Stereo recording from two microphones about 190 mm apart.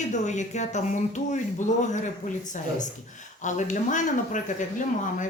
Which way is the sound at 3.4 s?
40° left (ahead or behind).